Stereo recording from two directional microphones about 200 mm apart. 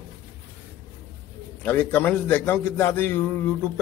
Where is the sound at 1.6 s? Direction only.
10° left (ahead or behind).